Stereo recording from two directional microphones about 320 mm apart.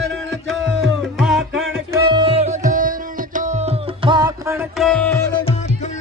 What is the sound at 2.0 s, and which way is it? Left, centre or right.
Music, centre.